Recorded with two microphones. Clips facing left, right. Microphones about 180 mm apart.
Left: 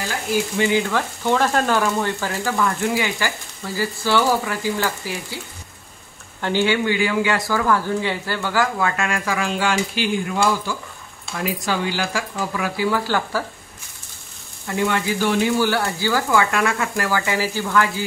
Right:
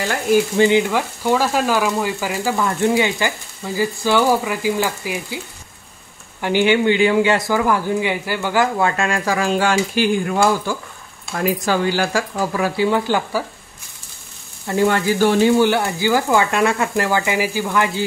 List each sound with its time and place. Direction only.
0.6 s frying: 20° right (ahead or behind)
6.4 s frying: 15° right (ahead or behind)
8.7 s speech: 30° right (ahead or behind)
14.7 s speech: 35° right (ahead or behind); by 17.9 s 15° right (ahead or behind)